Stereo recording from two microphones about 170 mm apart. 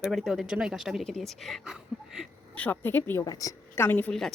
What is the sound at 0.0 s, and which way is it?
A woman's voice, centre (ahead or behind).